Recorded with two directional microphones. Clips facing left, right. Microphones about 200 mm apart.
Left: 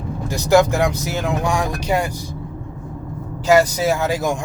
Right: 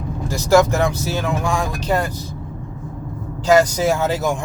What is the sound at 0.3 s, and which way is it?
Speech, 15° left (ahead or behind).